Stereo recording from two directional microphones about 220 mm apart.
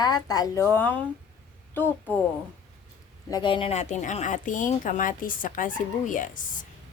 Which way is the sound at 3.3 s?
20° left (ahead or behind).